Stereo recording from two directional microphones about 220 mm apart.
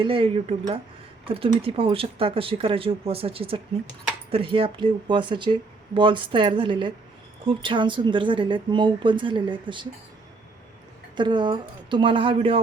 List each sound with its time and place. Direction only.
0.0 s speech: 25° right (ahead or behind)
11.2 s speech: 20° right (ahead or behind)